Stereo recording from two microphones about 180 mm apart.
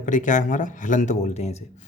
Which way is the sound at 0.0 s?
45° left (ahead or behind).